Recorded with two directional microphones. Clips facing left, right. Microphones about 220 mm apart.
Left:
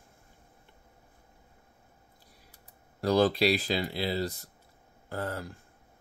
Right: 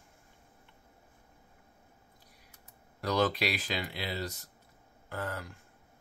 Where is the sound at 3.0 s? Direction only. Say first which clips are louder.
Left 6 dB; 35° left (ahead or behind).